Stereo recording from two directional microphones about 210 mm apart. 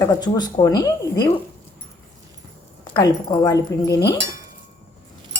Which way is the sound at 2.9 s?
20° left (ahead or behind).